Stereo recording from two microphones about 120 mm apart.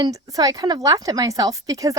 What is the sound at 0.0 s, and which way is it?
Speech, 30° right (ahead or behind).